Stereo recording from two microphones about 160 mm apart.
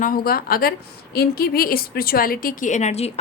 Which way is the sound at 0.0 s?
65° left (ahead or behind).